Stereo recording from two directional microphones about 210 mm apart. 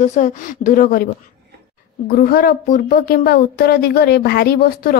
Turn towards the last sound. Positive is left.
turn(degrees=45)  # may be behind; listen again after turning